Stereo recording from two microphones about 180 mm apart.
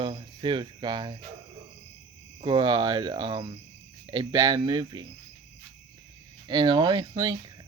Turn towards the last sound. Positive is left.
turn(degrees=-20)  # may be behind; listen again after turning